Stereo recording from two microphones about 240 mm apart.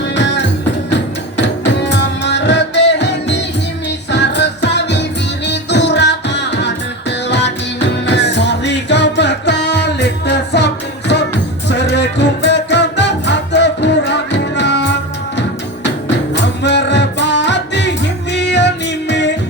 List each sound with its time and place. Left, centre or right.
0.0 s music: left
1.4 s music: left
16.3 s music: left